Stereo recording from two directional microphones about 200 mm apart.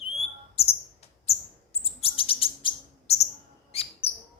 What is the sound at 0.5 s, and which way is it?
Chirp, 30° left (ahead or behind).